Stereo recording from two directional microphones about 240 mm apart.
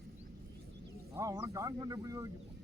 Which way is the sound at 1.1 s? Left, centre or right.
Centre.